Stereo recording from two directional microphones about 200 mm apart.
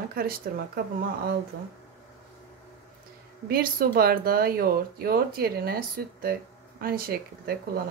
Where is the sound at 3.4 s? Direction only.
50° right (ahead or behind).